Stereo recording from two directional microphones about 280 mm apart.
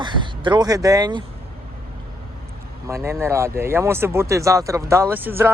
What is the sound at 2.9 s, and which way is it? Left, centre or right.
Speech, centre.